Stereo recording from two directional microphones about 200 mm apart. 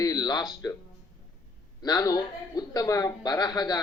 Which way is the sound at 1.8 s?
20° left (ahead or behind).